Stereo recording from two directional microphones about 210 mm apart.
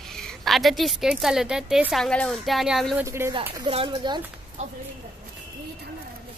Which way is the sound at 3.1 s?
15° right (ahead or behind).